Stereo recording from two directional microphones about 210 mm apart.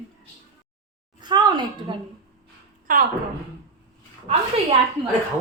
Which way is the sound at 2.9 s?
45° right (ahead or behind).